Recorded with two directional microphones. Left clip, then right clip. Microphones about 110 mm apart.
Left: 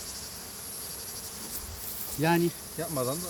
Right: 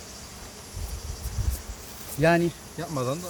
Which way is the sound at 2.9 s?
60° right (ahead or behind).